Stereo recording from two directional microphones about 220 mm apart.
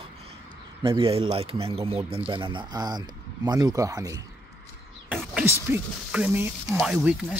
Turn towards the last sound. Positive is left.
turn(degrees=-5)  # may be behind; listen again after turning